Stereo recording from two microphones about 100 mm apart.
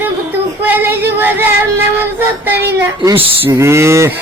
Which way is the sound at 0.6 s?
20° right (ahead or behind).